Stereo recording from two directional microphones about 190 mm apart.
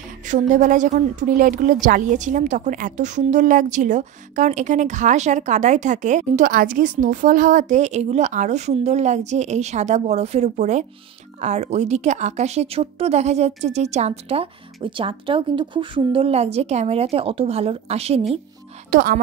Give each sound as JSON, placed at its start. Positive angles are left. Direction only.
{"t": 0.3, "sound": "a woman's voice", "side_deg": -40}
{"t": 18.9, "sound": "speech", "side_deg": -45}